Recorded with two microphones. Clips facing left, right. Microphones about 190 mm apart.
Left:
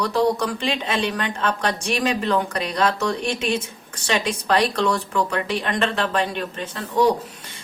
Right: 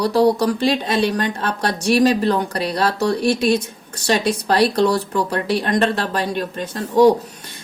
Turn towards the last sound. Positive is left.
turn(degrees=-40)  # may be behind; listen again after turning